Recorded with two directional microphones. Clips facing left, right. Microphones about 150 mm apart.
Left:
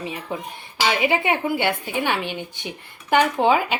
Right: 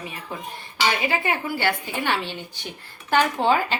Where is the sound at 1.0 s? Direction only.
20° left (ahead or behind).